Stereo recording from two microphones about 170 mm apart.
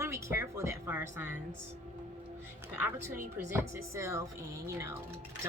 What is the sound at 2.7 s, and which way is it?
Speech, 10° right (ahead or behind).